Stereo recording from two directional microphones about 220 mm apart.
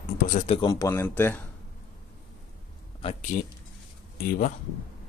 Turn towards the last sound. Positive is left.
turn(degrees=40)  # may be behind; listen again after turning